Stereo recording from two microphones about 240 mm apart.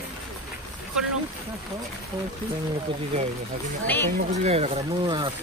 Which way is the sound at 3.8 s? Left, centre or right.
Centre.